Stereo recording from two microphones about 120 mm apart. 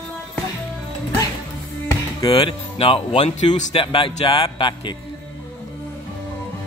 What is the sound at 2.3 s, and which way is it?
A man's voice, 50° left (ahead or behind).